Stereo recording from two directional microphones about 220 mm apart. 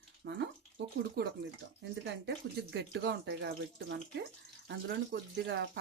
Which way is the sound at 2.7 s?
50° right (ahead or behind).